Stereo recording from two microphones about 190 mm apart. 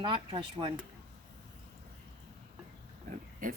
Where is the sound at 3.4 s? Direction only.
45° right (ahead or behind).